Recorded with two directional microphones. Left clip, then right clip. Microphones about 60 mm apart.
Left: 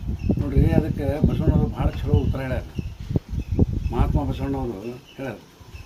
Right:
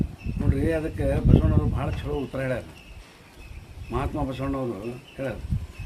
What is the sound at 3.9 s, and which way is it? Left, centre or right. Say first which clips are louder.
Speech: right 1 dB; centre.